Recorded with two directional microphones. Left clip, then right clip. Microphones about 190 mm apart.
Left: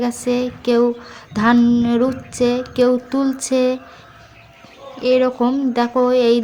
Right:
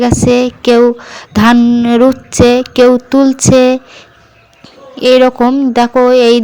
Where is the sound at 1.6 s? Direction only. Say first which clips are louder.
Right 7 dB; 30° right (ahead or behind).